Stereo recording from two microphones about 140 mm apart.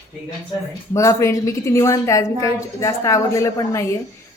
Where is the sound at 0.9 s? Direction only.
20° left (ahead or behind).